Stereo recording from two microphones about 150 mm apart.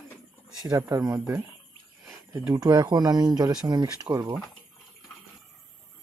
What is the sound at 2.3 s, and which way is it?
Speech, 25° right (ahead or behind).